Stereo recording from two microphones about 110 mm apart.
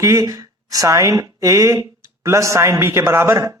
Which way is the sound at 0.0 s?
30° right (ahead or behind).